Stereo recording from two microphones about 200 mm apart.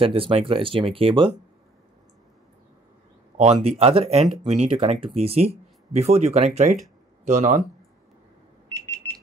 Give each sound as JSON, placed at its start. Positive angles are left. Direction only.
{"t": 0.0, "sound": "speech", "side_deg": -25}
{"t": 3.6, "sound": "speech", "side_deg": -30}
{"t": 8.7, "sound": "alarm", "side_deg": 10}